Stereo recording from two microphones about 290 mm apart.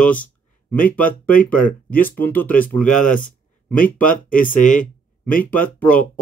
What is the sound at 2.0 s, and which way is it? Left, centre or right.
Speech, centre.